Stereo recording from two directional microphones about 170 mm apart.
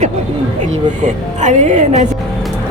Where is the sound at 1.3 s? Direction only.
45° right (ahead or behind).